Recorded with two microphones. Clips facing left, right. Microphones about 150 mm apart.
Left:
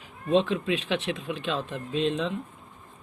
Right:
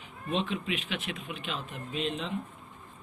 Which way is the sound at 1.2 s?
90° left.